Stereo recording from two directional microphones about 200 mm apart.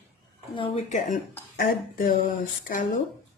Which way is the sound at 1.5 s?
45° left (ahead or behind).